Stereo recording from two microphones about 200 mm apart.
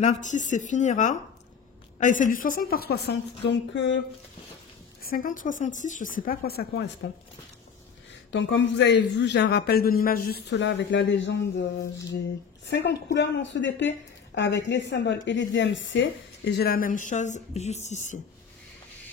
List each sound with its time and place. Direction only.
0.0 s a woman's voice: 35° left (ahead or behind); by 4.0 s 65° left (ahead or behind)
5.0 s a woman's voice: 45° left (ahead or behind)
8.3 s a man's voice: 65° left (ahead or behind)
12.6 s a man's voice: 60° left (ahead or behind); by 18.2 s 35° left (ahead or behind)